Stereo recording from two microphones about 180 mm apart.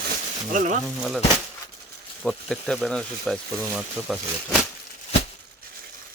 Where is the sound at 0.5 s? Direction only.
45° right (ahead or behind).